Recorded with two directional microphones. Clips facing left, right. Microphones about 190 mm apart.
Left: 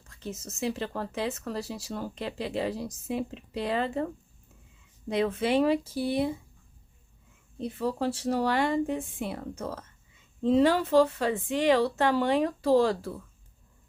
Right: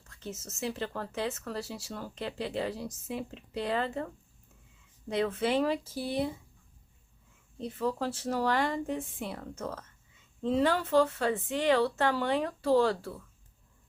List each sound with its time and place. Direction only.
0.2 s speech: 15° left (ahead or behind)
7.6 s speech: 10° left (ahead or behind)